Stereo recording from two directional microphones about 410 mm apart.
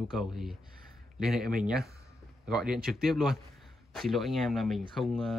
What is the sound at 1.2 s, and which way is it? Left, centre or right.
Speech, centre.